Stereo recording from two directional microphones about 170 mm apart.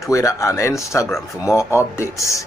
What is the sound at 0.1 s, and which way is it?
Speech, 15° left (ahead or behind).